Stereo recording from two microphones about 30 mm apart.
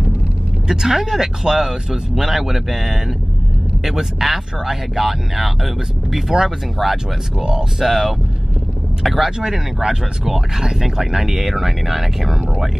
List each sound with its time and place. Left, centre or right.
0.7 s speech: centre
7.3 s speech: right
7.8 s speech: centre
9.4 s speech: centre